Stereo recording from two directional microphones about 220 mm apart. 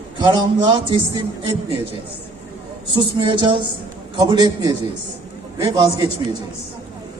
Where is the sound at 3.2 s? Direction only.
20° right (ahead or behind).